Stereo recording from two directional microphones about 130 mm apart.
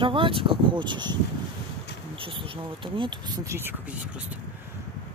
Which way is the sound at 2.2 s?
45° right (ahead or behind).